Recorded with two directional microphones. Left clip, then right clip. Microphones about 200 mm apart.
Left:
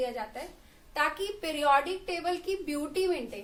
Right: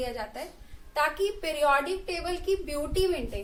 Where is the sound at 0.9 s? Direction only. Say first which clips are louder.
Right 3 dB; 25° left (ahead or behind).